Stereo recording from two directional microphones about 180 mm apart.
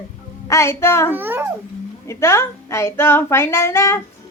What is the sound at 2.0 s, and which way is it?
Speech, 15° left (ahead or behind).